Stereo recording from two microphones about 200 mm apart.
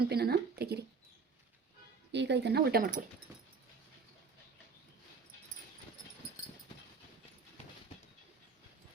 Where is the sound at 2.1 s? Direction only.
60° right (ahead or behind).